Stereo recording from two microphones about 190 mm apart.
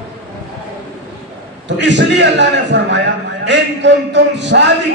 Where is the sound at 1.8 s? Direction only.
65° right (ahead or behind).